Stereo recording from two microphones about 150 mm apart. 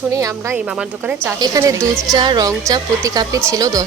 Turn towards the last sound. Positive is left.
turn(degrees=-25)  # may be behind; listen again after turning